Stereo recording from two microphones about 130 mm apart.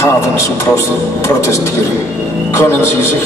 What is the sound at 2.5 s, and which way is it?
Speech, 20° left (ahead or behind).